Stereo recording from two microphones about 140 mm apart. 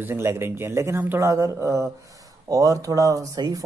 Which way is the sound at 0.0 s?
20° right (ahead or behind).